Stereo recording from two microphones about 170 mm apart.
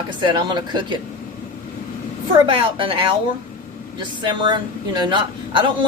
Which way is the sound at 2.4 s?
30° right (ahead or behind).